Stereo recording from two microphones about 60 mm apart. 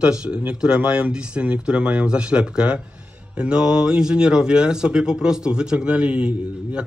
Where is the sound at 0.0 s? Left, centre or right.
Centre.